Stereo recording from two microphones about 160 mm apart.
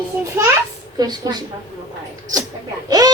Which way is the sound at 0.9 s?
25° right (ahead or behind).